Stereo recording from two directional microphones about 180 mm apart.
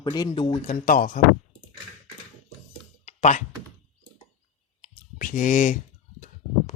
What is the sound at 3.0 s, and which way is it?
Music, 40° left (ahead or behind).